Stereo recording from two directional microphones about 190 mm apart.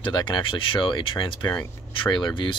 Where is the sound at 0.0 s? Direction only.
25° left (ahead or behind).